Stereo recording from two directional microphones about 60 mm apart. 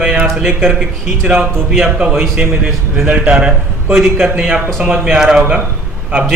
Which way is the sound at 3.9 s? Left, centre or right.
Centre.